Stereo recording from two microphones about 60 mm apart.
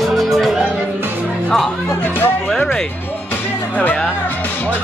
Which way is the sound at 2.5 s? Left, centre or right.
Centre.